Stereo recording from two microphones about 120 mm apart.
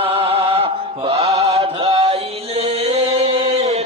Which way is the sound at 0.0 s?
50° right (ahead or behind).